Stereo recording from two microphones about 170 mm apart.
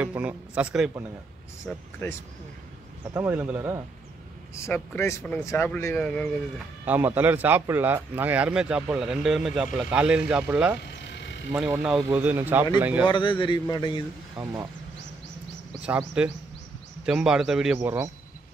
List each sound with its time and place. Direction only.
0.0 s a man's voice: 10° right (ahead or behind)
1.7 s speech: 10° left (ahead or behind)
3.1 s a man's voice: 15° right (ahead or behind)
4.6 s speech: 15° left (ahead or behind)
6.9 s a man's voice: 10° right (ahead or behind)
10.9 s a sound: 90° left
11.5 s a man's voice: 5° right (ahead or behind)
13.1 s a man's voice: 30° left (ahead or behind)
14.4 s a man's voice: 15° right (ahead or behind)
16.2 s a man's voice: 5° right (ahead or behind)